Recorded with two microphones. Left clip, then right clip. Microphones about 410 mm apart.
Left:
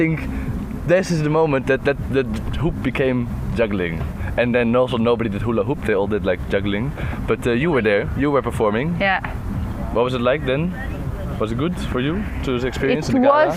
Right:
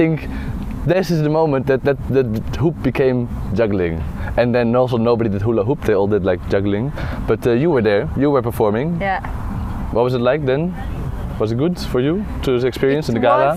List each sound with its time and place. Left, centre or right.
0.9 s speech: right
2.3 s speech: right
9.0 s speech: left
9.9 s speech: right